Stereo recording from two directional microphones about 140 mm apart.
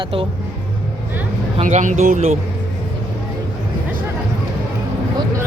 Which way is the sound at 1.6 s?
55° right (ahead or behind).